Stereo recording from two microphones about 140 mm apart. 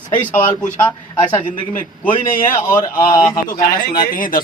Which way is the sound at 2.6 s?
20° left (ahead or behind).